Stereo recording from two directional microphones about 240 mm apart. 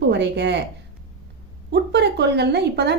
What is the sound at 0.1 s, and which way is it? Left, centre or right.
Speech, right.